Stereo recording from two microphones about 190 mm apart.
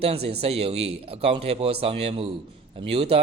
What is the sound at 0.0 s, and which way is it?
A man's voice, 30° right (ahead or behind).